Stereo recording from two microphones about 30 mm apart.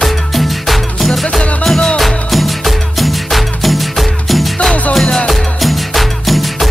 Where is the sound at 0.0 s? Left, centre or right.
Centre.